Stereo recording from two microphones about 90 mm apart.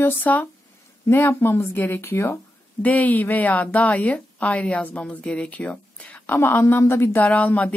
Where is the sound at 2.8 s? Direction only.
15° left (ahead or behind).